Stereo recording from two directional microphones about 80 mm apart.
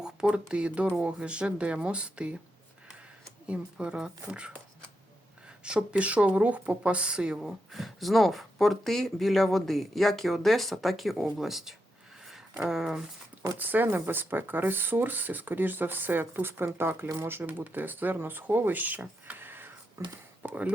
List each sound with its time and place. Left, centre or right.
0.0 s speech: centre
3.4 s speech: centre
7.7 s speech: centre
13.6 s speech: right
20.0 s speech: right
20.4 s speech: right